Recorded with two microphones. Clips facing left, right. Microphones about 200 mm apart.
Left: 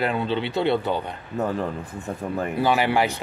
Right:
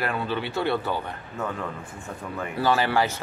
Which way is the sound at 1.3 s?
35° left (ahead or behind).